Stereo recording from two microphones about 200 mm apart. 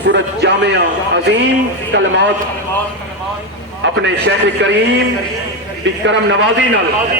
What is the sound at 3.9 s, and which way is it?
Speech, 65° right (ahead or behind).